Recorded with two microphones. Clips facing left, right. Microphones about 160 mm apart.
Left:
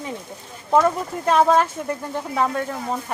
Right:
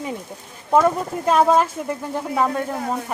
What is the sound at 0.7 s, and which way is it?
Speech, 5° right (ahead or behind).